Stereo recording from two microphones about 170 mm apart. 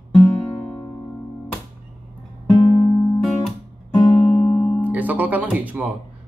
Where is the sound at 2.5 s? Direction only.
25° left (ahead or behind).